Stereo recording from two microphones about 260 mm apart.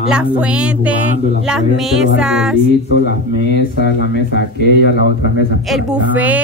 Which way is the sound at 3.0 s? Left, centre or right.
Left.